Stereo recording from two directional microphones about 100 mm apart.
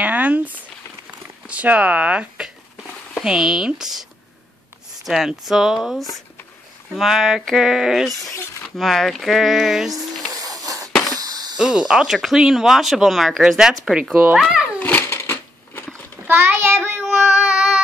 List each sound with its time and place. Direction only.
0.0 s a sound: 15° right (ahead or behind)
1.5 s speech: 15° right (ahead or behind)
10.3 s wheeze: 40° right (ahead or behind)
11.1 s a sound: 40° right (ahead or behind)
11.5 s speech: 5° right (ahead or behind)
14.1 s a child's voice: 10° right (ahead or behind)
14.8 s cat: 15° left (ahead or behind)
15.0 s a sound: 25° left (ahead or behind)
16.3 s child singing: 20° right (ahead or behind)
17.0 s child singing: 5° right (ahead or behind)